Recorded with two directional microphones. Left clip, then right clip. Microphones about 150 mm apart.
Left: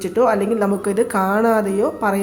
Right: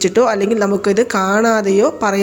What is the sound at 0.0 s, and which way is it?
A woman's voice, 30° right (ahead or behind).